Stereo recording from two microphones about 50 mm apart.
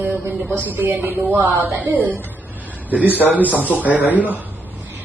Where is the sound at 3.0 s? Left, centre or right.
Left.